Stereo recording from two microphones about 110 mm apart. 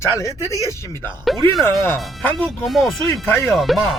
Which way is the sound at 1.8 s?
20° left (ahead or behind).